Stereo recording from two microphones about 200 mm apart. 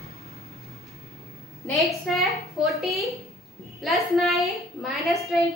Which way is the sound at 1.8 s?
Centre (ahead or behind).